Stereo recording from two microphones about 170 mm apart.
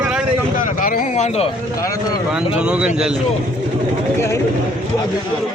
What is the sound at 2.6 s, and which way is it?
Speech, 5° right (ahead or behind).